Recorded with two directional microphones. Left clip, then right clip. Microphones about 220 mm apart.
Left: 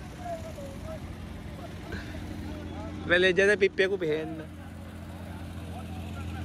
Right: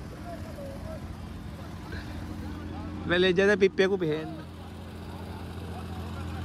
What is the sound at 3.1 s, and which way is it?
Speech, 20° right (ahead or behind).